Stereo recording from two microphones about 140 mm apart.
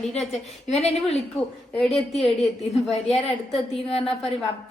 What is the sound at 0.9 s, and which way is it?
A woman's voice, centre (ahead or behind).